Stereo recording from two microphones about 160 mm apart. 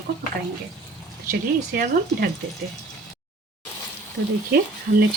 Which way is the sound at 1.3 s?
65° right (ahead or behind).